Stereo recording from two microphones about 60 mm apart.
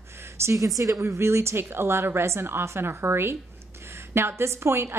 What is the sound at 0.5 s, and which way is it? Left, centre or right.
Speech, right.